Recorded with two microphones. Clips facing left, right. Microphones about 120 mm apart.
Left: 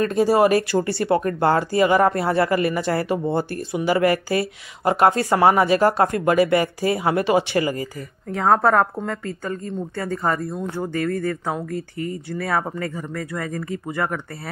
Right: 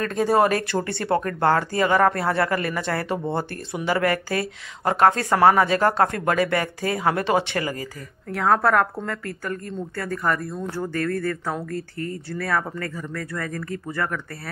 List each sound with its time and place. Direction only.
0.0 s speech: 10° left (ahead or behind)